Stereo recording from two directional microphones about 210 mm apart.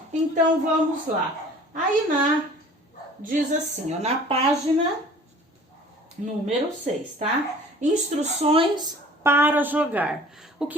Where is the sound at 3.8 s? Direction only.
30° right (ahead or behind).